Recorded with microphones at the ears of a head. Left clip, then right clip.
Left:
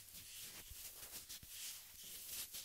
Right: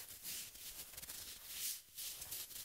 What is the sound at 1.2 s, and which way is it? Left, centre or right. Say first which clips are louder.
Rub: right 6 dB; right.